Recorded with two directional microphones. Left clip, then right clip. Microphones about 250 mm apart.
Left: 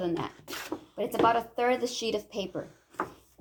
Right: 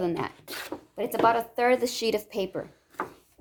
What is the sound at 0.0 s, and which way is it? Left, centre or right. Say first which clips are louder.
A woman's voice: right 3 dB; right.